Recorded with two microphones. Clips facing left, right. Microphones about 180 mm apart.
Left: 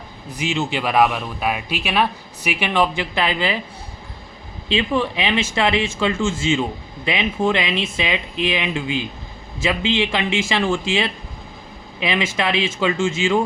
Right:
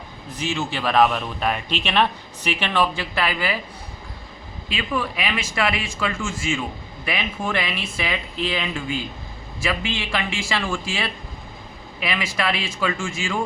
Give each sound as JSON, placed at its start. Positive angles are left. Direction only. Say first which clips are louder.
{"t": 0.3, "sound": "speech", "louder": "left 3 dB", "side_deg": 15}
{"t": 4.7, "sound": "speech", "louder": "left 6 dB", "side_deg": 25}